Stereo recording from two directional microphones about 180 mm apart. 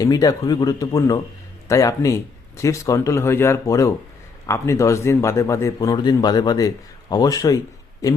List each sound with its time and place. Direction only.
0.0 s a man's voice: 20° left (ahead or behind)